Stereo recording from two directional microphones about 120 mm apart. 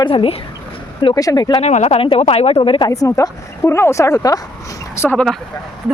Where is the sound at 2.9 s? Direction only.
25° left (ahead or behind).